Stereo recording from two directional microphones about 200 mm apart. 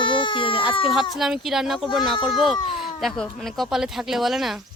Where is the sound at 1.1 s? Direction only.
Centre (ahead or behind).